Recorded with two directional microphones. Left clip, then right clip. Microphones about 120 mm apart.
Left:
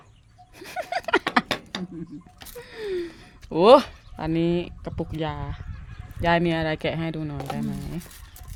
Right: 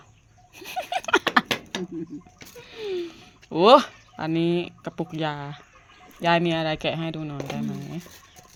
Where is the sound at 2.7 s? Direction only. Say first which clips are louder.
Even; 70° left (ahead or behind).